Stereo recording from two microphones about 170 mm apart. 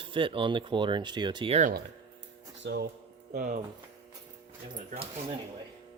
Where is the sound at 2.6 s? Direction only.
70° right (ahead or behind).